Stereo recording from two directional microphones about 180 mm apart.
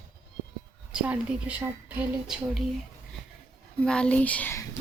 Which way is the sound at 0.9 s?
5° right (ahead or behind).